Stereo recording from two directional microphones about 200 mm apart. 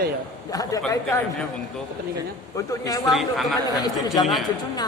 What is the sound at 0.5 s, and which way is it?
Speech, 15° left (ahead or behind).